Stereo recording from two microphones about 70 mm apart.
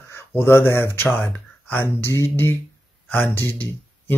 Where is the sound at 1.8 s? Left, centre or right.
Left.